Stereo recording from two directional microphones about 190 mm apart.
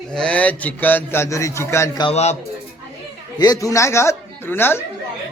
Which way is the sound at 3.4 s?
20° left (ahead or behind).